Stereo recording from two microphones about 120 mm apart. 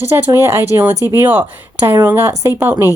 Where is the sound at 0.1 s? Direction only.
20° right (ahead or behind).